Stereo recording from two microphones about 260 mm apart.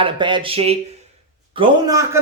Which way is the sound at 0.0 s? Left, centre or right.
Centre.